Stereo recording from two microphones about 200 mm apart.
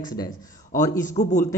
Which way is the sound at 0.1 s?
20° left (ahead or behind).